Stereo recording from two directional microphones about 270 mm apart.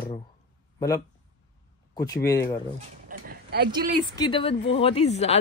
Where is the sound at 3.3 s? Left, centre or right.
Right.